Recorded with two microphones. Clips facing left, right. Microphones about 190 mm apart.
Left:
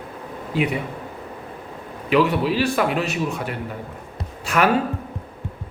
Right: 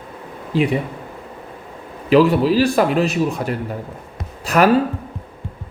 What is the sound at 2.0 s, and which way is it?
Speech, 35° right (ahead or behind).